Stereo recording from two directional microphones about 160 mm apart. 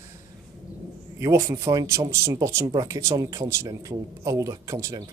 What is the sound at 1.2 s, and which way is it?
Speech, 20° right (ahead or behind).